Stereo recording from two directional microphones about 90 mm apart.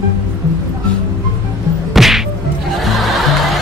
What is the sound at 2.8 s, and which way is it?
Music, centre (ahead or behind).